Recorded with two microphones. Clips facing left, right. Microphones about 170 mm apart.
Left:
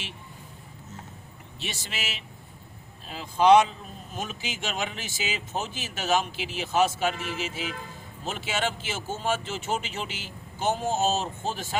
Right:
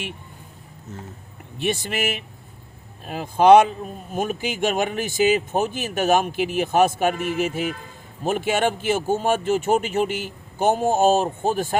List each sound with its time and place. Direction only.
1.5 s speech: 55° right (ahead or behind)